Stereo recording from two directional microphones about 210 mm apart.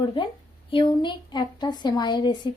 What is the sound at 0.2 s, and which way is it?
A woman's voice, 25° left (ahead or behind).